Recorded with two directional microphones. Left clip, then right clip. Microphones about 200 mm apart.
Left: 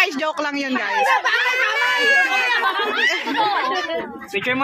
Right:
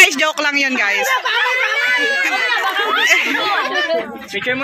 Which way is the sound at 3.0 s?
5° left (ahead or behind).